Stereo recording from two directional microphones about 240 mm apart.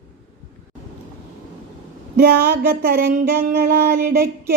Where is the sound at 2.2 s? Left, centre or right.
Right.